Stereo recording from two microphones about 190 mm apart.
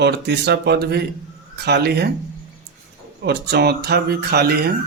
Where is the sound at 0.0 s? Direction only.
60° right (ahead or behind).